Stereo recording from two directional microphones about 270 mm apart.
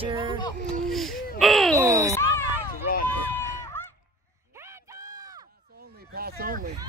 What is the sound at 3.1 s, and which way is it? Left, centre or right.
Run, centre.